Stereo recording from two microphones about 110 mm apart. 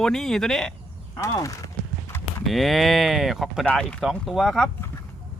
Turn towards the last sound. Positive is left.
turn(degrees=0)  # may be behind; listen again after turning